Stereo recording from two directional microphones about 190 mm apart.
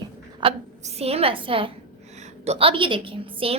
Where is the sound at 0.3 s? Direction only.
30° right (ahead or behind).